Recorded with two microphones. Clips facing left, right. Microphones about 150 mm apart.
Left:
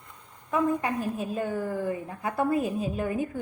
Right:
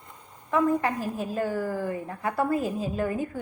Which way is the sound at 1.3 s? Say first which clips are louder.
Right 3 dB; 20° left (ahead or behind).